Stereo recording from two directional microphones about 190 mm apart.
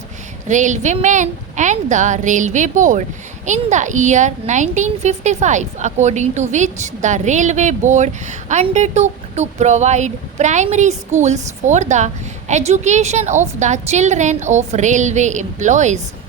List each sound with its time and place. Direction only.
0.4 s a woman's voice: 40° right (ahead or behind)